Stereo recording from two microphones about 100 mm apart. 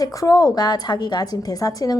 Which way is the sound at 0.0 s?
35° left (ahead or behind).